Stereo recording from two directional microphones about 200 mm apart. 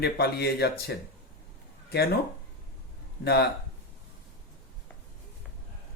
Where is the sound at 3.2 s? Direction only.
55° left (ahead or behind).